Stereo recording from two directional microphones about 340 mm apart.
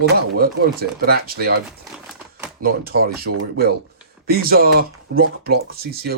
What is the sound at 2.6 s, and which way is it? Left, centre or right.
Speech, right.